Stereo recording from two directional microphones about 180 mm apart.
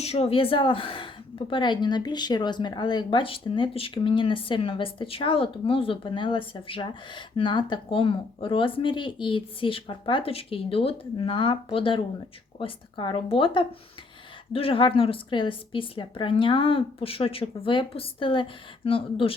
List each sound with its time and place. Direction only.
0.0 s a woman's voice: 35° left (ahead or behind)